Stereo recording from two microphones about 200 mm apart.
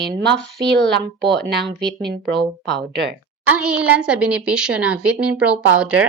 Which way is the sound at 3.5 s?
5° right (ahead or behind).